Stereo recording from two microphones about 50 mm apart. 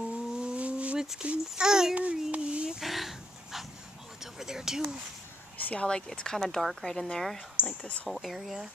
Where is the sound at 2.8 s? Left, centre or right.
Centre.